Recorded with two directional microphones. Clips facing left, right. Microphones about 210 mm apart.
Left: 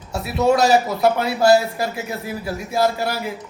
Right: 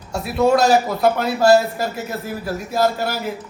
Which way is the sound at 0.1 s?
5° left (ahead or behind).